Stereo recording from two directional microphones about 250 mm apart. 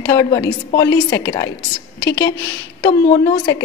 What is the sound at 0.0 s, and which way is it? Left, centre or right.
A woman's voice, centre.